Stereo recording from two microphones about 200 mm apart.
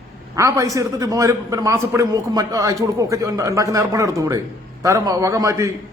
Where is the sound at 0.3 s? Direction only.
15° right (ahead or behind).